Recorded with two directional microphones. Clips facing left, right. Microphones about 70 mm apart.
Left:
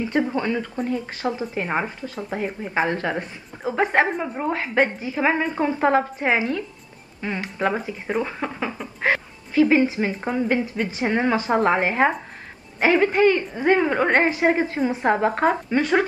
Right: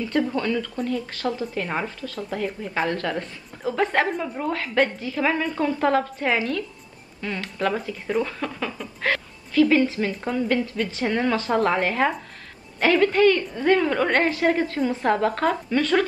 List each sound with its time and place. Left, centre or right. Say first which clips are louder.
0.0 s speech: left 1 dB; left